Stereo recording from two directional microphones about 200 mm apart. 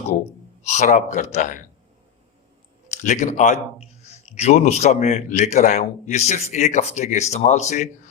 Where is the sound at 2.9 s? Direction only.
35° left (ahead or behind).